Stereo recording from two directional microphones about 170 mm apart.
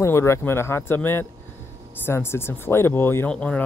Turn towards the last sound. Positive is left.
turn(degrees=5)  # may be behind; listen again after turning